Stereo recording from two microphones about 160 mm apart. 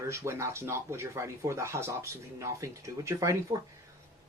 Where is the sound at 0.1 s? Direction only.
15° right (ahead or behind).